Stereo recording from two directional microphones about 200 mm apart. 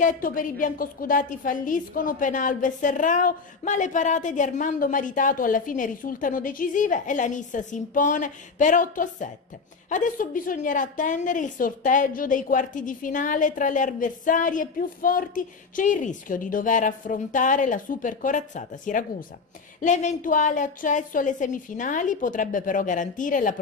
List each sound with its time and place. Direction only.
0.0 s a woman's voice: 45° left (ahead or behind)